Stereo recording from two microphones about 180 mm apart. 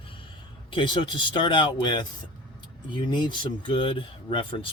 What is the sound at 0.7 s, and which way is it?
Speech, 25° left (ahead or behind).